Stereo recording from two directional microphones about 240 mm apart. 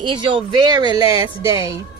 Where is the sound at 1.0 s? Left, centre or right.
Left.